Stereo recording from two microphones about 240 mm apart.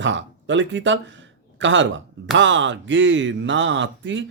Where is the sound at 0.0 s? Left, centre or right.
Right.